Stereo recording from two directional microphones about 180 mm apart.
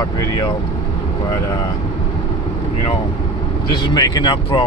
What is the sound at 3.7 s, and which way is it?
Speech, 25° left (ahead or behind).